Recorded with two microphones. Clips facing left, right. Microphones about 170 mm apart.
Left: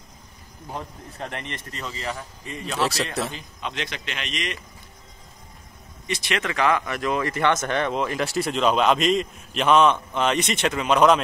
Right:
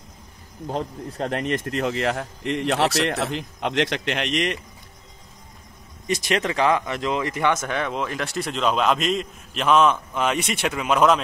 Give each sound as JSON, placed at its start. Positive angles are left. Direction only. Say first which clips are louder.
{"t": 0.7, "sound": "speech", "louder": "right 7 dB", "side_deg": -30}
{"t": 1.7, "sound": "speech", "louder": "right 6 dB", "side_deg": -65}
{"t": 6.0, "sound": "speech", "louder": "right 4 dB", "side_deg": -40}